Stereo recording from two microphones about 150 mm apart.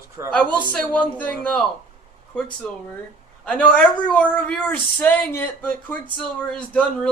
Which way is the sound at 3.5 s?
5° left (ahead or behind).